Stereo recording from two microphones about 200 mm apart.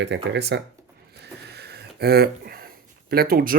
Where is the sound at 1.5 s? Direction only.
55° right (ahead or behind).